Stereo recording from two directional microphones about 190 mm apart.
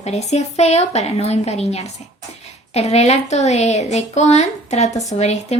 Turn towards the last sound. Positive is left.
turn(degrees=35)  # may be behind; listen again after turning